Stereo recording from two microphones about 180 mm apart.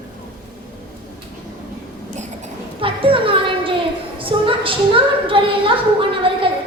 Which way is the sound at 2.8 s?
30° right (ahead or behind).